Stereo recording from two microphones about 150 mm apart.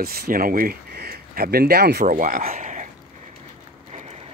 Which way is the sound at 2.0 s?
60° right (ahead or behind).